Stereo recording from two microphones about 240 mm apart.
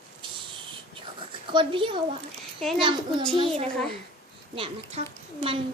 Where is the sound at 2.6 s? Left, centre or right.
Centre.